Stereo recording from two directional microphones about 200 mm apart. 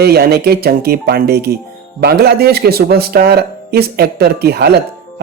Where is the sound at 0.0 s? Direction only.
50° right (ahead or behind).